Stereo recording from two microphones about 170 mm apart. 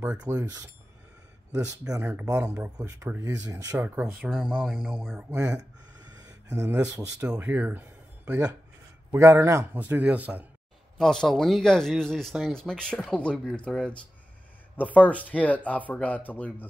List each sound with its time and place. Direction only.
0.0 s speech: 10° right (ahead or behind)
1.9 s speech: 15° right (ahead or behind)
3.7 s speech: 10° right (ahead or behind)
9.1 s speech: 15° right (ahead or behind)
11.0 s speech: 5° left (ahead or behind)